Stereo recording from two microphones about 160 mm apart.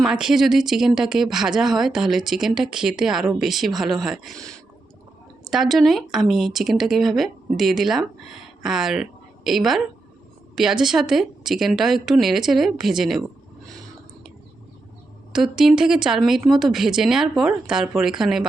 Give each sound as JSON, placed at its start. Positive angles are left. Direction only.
{"t": 0.0, "sound": "speech", "side_deg": -5}
{"t": 15.3, "sound": "speech", "side_deg": -5}